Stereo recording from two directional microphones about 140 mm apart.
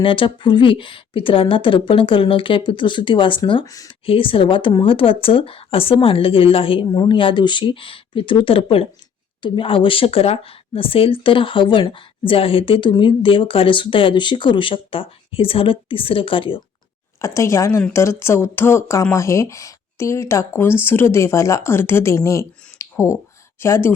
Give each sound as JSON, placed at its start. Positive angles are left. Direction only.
{"t": 0.0, "sound": "speech", "side_deg": 40}
{"t": 4.0, "sound": "speech", "side_deg": 40}
{"t": 17.2, "sound": "speech", "side_deg": 20}